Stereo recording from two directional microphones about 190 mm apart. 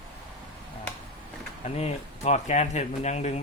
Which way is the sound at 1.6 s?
35° left (ahead or behind).